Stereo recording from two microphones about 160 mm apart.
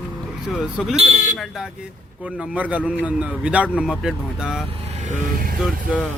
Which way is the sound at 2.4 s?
10° right (ahead or behind).